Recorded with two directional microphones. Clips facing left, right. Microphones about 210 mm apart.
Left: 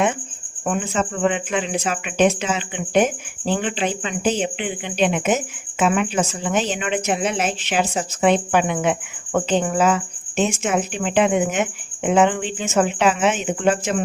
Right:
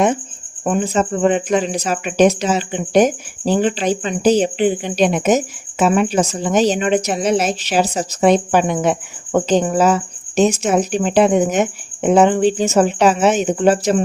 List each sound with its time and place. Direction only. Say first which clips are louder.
0.6 s a woman's voice: right 5 dB; 35° right (ahead or behind)